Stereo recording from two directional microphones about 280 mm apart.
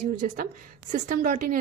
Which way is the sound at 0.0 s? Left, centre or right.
Right.